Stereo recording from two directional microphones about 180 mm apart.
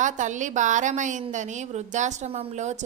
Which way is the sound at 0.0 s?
45° right (ahead or behind).